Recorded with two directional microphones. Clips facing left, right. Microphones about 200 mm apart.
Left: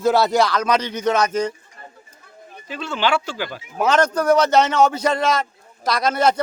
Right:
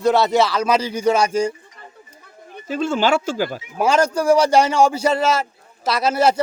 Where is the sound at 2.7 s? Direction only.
45° right (ahead or behind).